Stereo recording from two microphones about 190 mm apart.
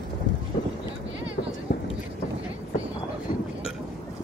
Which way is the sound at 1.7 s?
55° left (ahead or behind).